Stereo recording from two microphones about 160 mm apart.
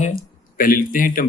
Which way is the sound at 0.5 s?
60° left (ahead or behind).